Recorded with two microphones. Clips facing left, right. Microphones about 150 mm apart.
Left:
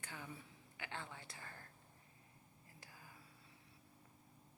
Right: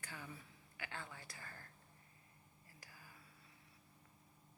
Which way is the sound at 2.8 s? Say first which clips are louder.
Left 1 dB; 20° left (ahead or behind).